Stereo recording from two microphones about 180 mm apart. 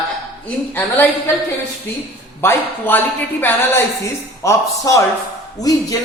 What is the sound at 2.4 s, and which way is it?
Speech, 10° left (ahead or behind).